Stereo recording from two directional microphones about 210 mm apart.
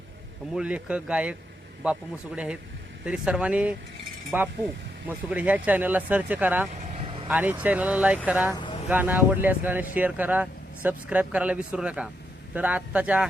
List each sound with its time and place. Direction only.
0.5 s speech: 5° right (ahead or behind)
6.8 s vehicle: 30° right (ahead or behind)
7.3 s speech: 10° right (ahead or behind)